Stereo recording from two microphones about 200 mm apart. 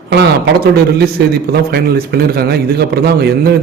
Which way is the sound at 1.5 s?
55° right (ahead or behind).